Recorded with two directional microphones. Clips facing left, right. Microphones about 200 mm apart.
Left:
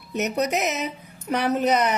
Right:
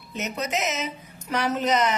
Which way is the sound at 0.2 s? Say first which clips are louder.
Left 5 dB; 65° left (ahead or behind).